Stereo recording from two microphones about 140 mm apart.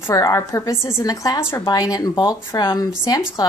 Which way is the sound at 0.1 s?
25° left (ahead or behind).